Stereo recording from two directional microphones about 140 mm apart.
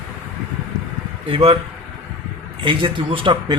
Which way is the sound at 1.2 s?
40° right (ahead or behind).